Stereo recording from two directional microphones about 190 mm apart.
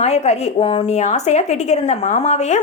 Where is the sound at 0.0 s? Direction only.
35° left (ahead or behind).